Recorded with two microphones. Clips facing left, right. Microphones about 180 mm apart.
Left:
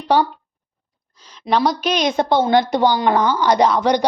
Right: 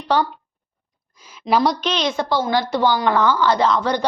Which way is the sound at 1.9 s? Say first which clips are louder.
Left 4 dB; 15° left (ahead or behind).